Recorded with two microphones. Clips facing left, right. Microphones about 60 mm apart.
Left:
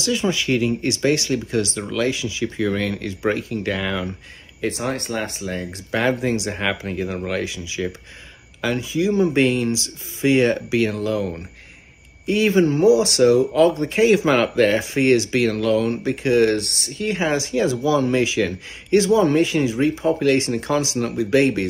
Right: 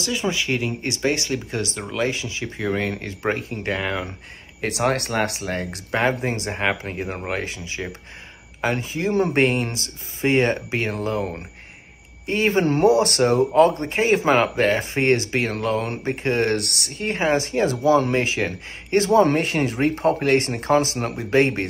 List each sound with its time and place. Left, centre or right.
0.0 s speech: right
4.6 s speech: right
5.9 s speech: right
16.5 s speech: right
17.0 s speech: right